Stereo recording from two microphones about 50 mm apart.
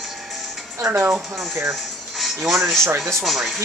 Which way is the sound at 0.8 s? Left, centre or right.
Right.